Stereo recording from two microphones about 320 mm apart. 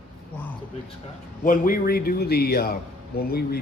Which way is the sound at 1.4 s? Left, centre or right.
Left.